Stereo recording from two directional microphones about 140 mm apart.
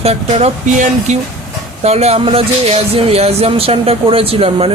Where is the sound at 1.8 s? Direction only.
50° right (ahead or behind).